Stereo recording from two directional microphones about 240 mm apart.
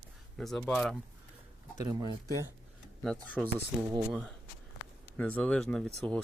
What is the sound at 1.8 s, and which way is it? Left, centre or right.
Speech, centre.